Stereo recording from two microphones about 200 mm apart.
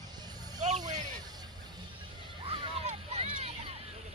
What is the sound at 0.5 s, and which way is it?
Vehicle, 35° right (ahead or behind).